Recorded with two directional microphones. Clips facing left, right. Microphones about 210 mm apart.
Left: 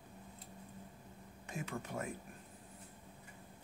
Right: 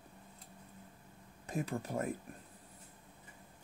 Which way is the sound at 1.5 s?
35° right (ahead or behind).